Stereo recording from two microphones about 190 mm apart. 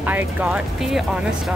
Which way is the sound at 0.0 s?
10° right (ahead or behind).